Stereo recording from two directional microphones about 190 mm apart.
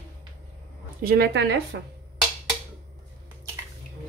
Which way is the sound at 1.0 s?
60° right (ahead or behind).